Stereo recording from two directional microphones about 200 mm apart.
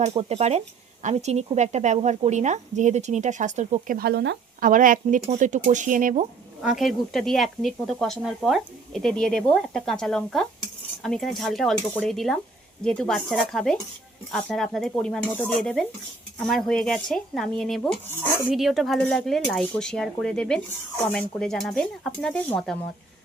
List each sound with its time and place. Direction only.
0.0 s a woman's voice: 30° right (ahead or behind); by 4.4 s 55° right (ahead or behind)
4.6 s a woman's voice: 40° right (ahead or behind)
6.6 s speech: centre (ahead or behind)